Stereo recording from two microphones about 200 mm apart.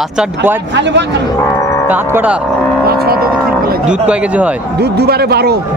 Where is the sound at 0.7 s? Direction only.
60° right (ahead or behind).